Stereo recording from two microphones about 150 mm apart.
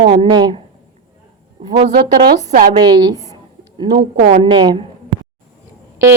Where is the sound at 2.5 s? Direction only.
65° right (ahead or behind).